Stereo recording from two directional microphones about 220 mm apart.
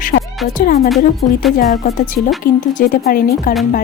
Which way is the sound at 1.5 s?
35° left (ahead or behind).